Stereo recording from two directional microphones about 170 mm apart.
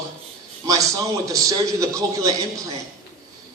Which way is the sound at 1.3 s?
20° right (ahead or behind).